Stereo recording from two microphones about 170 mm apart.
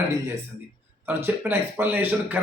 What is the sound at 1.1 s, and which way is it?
Speech, 10° right (ahead or behind).